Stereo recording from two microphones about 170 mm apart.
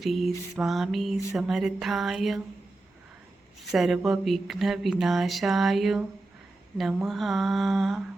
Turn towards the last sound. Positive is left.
turn(degrees=0)  # may be behind; listen again after turning